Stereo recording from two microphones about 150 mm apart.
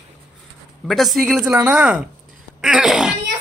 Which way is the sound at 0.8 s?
Centre (ahead or behind).